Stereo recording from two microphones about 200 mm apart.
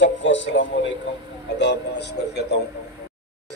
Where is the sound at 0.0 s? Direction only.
65° left (ahead or behind).